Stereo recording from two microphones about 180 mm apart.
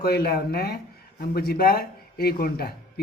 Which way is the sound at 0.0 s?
60° left (ahead or behind).